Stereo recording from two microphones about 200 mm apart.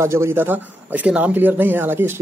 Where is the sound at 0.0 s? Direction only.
15° right (ahead or behind).